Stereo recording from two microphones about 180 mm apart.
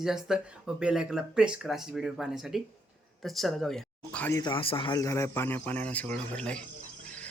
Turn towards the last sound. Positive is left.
turn(degrees=5)  # may be behind; listen again after turning